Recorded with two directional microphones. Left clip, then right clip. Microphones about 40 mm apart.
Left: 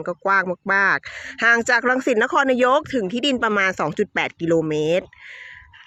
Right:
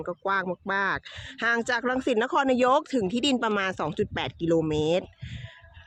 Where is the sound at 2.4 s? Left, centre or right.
Left.